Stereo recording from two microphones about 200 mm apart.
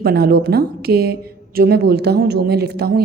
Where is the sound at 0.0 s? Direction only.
50° right (ahead or behind).